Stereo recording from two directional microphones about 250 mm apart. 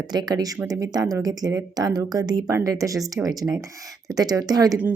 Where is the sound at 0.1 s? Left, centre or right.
Centre.